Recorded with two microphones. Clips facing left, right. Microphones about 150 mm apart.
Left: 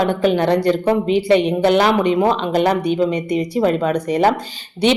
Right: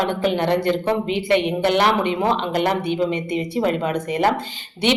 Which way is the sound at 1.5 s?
20° left (ahead or behind).